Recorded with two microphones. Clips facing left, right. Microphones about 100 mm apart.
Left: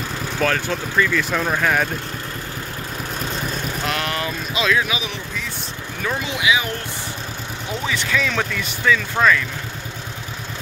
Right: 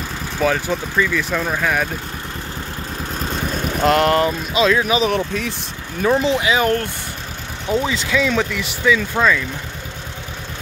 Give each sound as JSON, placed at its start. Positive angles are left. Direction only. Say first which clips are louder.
{"t": 0.4, "sound": "speech", "louder": "right 3 dB", "side_deg": -10}
{"t": 3.8, "sound": "speech", "louder": "right 12 dB", "side_deg": -40}
{"t": 5.1, "sound": "speech", "louder": "right 10 dB", "side_deg": -65}
{"t": 6.0, "sound": "speech", "louder": "right 6 dB", "side_deg": -35}
{"t": 7.8, "sound": "speech", "louder": "right 3 dB", "side_deg": -20}
{"t": 8.4, "sound": "speech", "louder": "right 3 dB", "side_deg": -10}